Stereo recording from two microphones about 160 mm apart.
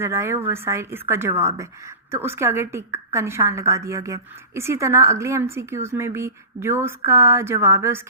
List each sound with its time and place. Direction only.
0.0 s a woman's voice: 15° right (ahead or behind)